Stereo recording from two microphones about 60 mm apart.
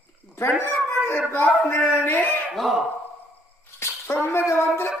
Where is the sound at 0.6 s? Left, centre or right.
Left.